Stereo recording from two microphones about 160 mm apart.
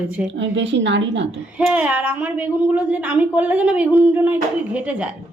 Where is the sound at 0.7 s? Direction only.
90° right.